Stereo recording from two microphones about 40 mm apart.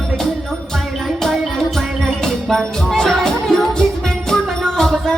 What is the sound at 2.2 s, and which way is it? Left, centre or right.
Music, centre.